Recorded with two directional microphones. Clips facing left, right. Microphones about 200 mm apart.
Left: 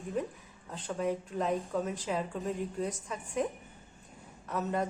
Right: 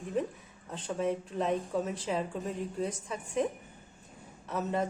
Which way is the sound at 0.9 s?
Centre (ahead or behind).